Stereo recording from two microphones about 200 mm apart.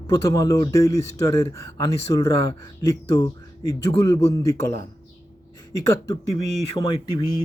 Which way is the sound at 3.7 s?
15° left (ahead or behind).